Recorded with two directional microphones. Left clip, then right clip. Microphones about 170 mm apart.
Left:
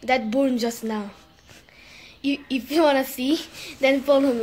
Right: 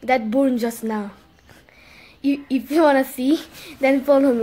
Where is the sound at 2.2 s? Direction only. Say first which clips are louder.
Right 4 dB; 20° right (ahead or behind).